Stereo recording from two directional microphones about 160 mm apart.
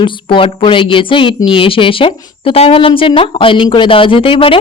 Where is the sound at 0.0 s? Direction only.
30° left (ahead or behind).